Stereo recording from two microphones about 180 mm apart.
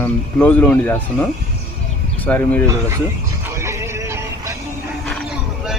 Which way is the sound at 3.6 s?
15° right (ahead or behind).